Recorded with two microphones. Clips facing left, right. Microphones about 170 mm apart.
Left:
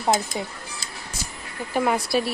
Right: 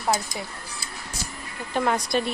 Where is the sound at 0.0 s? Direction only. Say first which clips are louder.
Left 3 dB; 20° left (ahead or behind).